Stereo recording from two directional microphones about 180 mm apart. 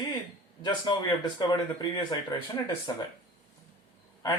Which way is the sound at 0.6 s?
25° left (ahead or behind).